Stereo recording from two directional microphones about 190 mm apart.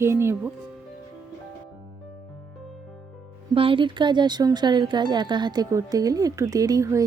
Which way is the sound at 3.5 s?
25° right (ahead or behind).